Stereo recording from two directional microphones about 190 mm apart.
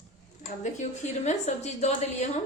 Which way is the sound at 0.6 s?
40° left (ahead or behind).